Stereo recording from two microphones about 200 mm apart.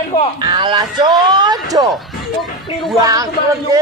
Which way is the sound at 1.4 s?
20° right (ahead or behind).